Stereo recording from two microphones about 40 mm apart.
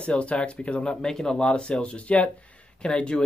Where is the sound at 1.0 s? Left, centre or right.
Centre.